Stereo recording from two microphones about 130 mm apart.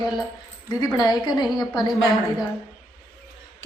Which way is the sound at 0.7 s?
30° left (ahead or behind).